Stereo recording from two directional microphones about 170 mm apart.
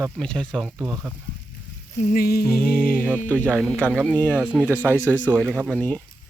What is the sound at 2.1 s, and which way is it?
Music, 60° left (ahead or behind).